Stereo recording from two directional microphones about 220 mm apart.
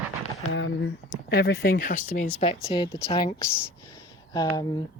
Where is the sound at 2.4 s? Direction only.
20° left (ahead or behind).